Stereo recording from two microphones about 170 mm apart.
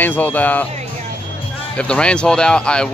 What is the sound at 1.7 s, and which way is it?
Speech, 5° left (ahead or behind).